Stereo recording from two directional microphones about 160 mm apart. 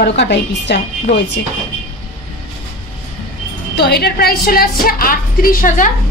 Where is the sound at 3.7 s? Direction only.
85° left; by 5.9 s 60° left (ahead or behind).